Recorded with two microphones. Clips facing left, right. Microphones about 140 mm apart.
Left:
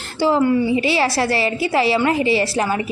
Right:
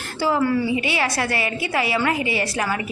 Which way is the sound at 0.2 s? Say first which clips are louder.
Left 4 dB; 25° left (ahead or behind).